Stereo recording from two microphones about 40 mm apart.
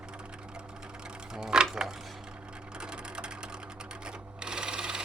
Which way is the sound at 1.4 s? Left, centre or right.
Right.